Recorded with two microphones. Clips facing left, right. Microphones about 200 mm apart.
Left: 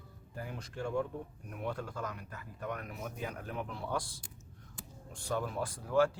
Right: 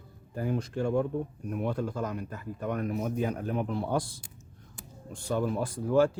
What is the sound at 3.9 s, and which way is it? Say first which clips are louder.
Speech: right 7 dB; 20° right (ahead or behind).